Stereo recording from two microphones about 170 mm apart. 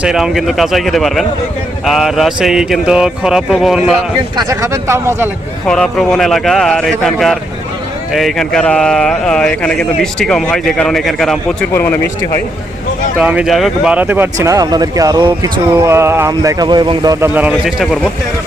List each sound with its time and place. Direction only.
0.0 s speech: 5° right (ahead or behind)
4.4 s speech: 20° right (ahead or behind)
5.6 s speech: 5° left (ahead or behind)
13.1 s speech: 10° right (ahead or behind)